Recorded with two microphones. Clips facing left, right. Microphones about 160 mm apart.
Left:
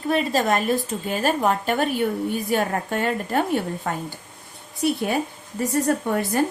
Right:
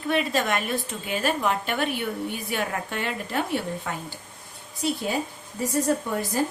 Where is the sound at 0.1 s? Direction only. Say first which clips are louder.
Left 3 dB; 35° left (ahead or behind).